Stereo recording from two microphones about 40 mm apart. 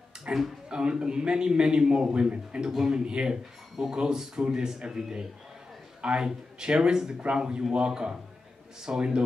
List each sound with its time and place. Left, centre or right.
0.3 s speech: right
0.7 s a man's voice: centre
5.9 s a sound: right
6.2 s a man's voice: centre